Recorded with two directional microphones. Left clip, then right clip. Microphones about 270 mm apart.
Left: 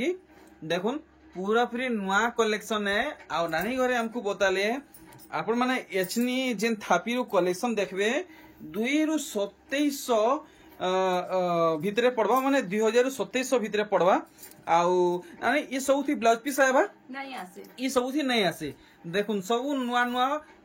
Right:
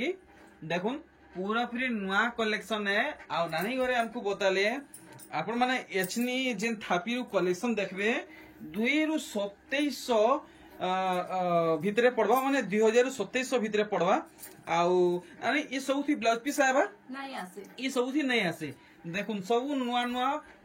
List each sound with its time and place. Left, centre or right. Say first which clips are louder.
0.7 s speech: left 3 dB; centre